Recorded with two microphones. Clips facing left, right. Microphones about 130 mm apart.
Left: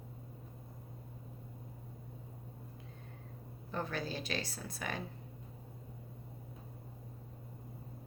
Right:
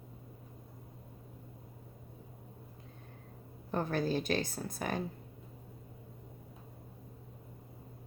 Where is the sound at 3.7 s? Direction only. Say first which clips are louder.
Right 7 dB; 50° right (ahead or behind).